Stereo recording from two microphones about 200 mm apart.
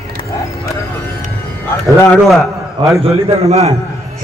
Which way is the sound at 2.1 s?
5° left (ahead or behind).